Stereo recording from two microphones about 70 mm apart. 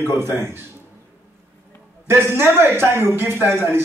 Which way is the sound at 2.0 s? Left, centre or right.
Right.